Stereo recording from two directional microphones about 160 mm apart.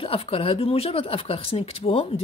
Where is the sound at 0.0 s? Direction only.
35° left (ahead or behind).